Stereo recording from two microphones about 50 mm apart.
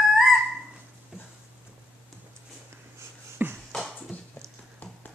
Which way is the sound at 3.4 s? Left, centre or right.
Right.